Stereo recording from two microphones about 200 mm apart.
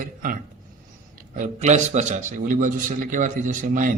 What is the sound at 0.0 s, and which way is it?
Speech, 45° right (ahead or behind).